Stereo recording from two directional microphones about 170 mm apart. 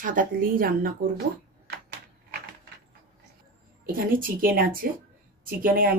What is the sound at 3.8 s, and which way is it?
Speech, 60° right (ahead or behind).